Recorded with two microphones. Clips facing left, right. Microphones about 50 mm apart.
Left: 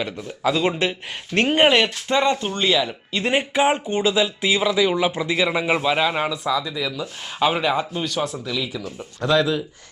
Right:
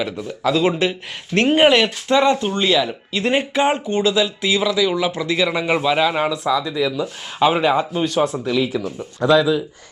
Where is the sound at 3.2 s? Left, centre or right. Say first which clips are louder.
Right 1 dB; centre.